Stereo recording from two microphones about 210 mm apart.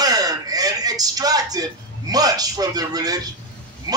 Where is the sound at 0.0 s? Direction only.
20° right (ahead or behind).